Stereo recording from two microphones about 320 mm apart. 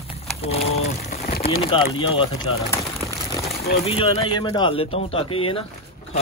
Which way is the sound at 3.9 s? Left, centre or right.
Centre.